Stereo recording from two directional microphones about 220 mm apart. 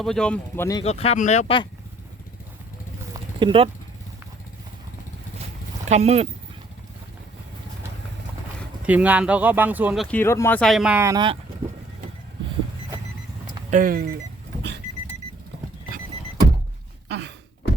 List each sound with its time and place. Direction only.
0.0 s speech: 5° left (ahead or behind)
0.8 s speech: 30° left (ahead or behind)
3.1 s a sound: 25° right (ahead or behind)
5.8 s speech: 30° right (ahead or behind)
8.9 s speech: 5° right (ahead or behind)
13.5 s speech: 35° right (ahead or behind)
17.1 s a sound: 50° right (ahead or behind)